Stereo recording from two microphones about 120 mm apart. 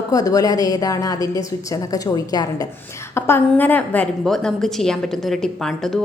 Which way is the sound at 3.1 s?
20° left (ahead or behind).